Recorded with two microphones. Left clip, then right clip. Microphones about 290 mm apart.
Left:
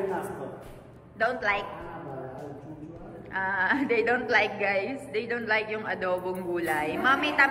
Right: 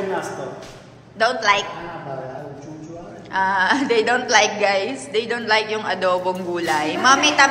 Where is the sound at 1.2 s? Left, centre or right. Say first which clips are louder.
Right 9 dB; centre.